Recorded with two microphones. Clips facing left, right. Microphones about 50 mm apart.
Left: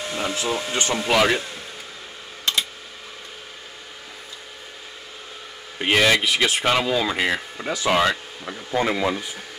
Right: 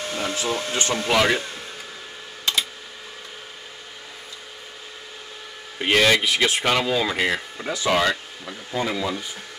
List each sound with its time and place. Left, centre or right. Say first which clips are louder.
0.0 s speech: left 1 dB; centre
5.8 s speech: even; centre
8.7 s speech: left 3 dB; left